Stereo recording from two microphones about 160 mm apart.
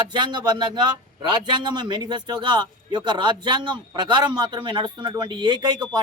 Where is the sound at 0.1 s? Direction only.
30° right (ahead or behind).